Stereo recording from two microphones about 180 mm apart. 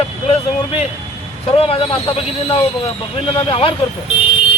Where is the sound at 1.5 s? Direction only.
30° left (ahead or behind).